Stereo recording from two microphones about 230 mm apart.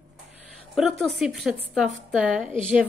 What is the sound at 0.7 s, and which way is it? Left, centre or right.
A woman's voice, centre.